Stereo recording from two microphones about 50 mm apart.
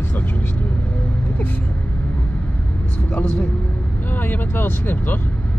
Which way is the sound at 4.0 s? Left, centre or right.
Left.